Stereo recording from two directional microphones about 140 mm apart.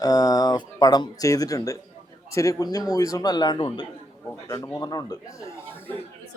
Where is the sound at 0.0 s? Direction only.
25° left (ahead or behind).